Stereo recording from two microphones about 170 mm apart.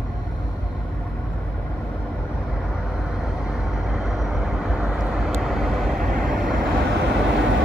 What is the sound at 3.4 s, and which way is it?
Vehicle, 5° right (ahead or behind).